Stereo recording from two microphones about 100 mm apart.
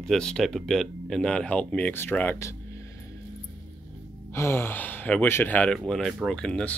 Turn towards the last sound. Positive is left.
turn(degrees=10)  # may be behind; listen again after turning